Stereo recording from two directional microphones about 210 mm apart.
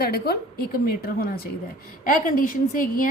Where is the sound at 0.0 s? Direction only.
45° left (ahead or behind).